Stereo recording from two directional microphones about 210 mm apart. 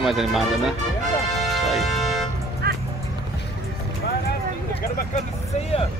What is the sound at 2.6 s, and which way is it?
Music, 50° right (ahead or behind).